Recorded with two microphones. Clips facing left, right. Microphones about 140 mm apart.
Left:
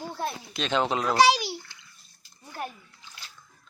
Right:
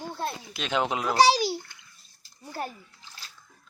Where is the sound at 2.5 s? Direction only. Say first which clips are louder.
Right 2 dB; 35° right (ahead or behind).